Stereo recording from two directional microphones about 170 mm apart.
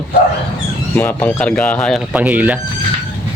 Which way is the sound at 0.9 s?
10° left (ahead or behind).